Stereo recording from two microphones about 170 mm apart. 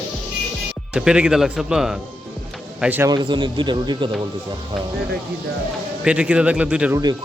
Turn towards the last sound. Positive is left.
turn(degrees=-5)  # may be behind; listen again after turning